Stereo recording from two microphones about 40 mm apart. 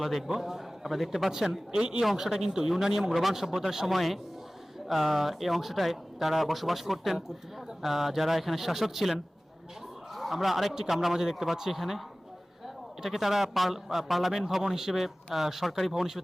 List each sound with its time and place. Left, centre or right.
0.0 s a man's voice: centre
1.7 s a man's voice: centre